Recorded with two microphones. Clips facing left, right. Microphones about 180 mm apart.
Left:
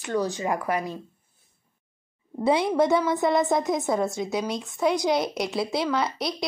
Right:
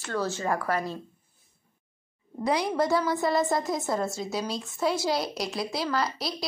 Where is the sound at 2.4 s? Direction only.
25° left (ahead or behind).